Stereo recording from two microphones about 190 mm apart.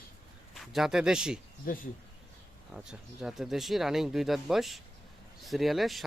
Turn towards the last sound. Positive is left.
turn(degrees=0)  # may be behind; listen again after turning